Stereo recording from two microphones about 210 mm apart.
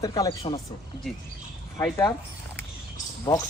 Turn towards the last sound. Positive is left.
turn(degrees=20)  # may be behind; listen again after turning